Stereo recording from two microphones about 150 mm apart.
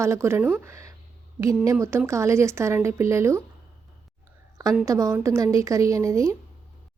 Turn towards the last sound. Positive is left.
turn(degrees=-20)  # may be behind; listen again after turning